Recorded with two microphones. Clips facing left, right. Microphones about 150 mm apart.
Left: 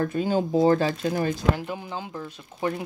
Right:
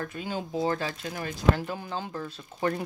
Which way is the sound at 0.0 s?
40° left (ahead or behind).